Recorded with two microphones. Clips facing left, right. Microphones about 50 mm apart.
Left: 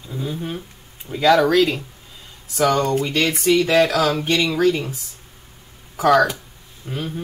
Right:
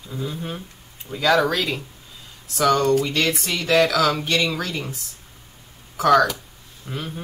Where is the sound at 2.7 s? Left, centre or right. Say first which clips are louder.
Right 1 dB; left.